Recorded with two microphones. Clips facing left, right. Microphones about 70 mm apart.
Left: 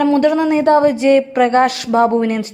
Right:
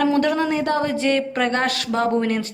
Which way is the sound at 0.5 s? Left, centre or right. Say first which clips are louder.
Left 10 dB; left.